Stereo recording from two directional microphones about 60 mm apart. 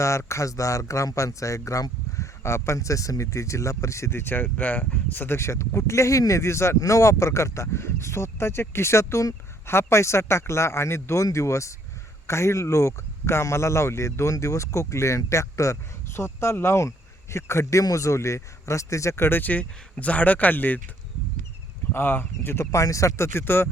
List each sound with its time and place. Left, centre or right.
0.0 s speech: left
2.4 s speech: left
5.4 s speech: left
16.2 s speech: left
21.9 s speech: left